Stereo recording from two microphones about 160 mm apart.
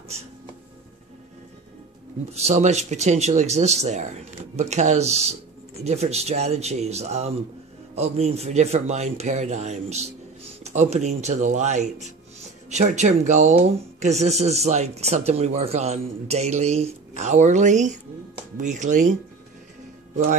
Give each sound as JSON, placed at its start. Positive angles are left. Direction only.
{"t": 2.3, "sound": "speech", "side_deg": -45}